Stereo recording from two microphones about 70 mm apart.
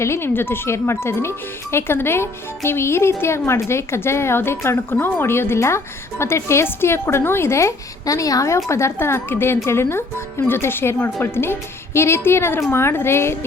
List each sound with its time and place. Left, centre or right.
0.0 s speech: left